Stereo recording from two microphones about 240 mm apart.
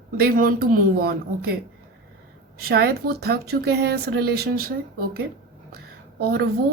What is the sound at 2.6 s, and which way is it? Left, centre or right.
Speech, right.